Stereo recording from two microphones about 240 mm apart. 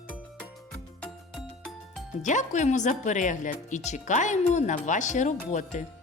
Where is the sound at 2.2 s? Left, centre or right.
Left.